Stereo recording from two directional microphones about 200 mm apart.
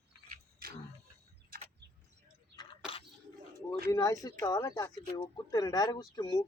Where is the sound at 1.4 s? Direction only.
50° right (ahead or behind).